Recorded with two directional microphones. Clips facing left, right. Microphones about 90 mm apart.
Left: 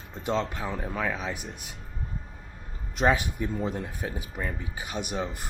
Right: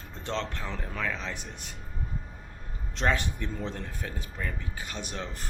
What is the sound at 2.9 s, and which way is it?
Speech, 10° left (ahead or behind).